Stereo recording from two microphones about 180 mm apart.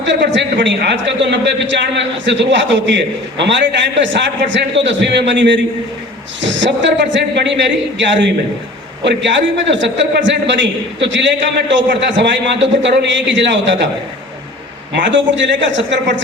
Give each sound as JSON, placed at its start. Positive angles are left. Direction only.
{"t": 0.0, "sound": "a man's voice", "side_deg": -85}
{"t": 14.9, "sound": "a man's voice", "side_deg": -90}